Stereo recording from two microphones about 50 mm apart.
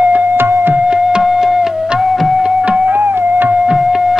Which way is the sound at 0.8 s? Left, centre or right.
Centre.